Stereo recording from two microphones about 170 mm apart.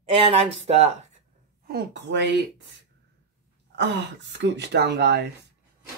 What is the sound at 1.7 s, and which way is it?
Speech, 80° right.